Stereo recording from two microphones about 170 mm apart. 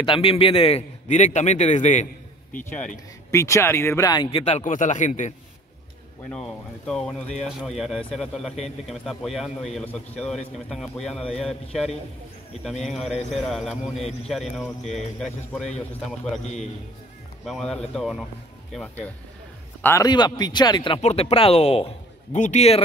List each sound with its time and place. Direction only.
0.0 s a man's voice: 30° left (ahead or behind)
3.3 s a man's voice: 15° left (ahead or behind); by 5.3 s 45° left (ahead or behind)
6.3 s speech: 5° left (ahead or behind)
12.8 s speech: centre (ahead or behind)
17.5 s a man's voice: 5° left (ahead or behind)
20.1 s a man's voice: 25° left (ahead or behind); by 22.8 s 40° left (ahead or behind)